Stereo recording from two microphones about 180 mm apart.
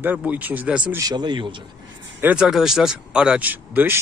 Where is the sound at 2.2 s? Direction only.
5° right (ahead or behind).